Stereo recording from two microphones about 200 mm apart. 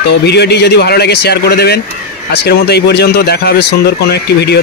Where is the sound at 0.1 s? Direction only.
55° left (ahead or behind).